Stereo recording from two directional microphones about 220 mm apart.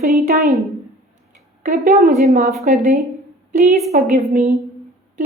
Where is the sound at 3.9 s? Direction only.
35° right (ahead or behind).